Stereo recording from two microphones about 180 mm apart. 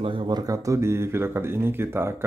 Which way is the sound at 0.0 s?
25° right (ahead or behind).